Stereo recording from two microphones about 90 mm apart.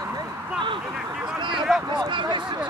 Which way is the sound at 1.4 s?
65° right (ahead or behind).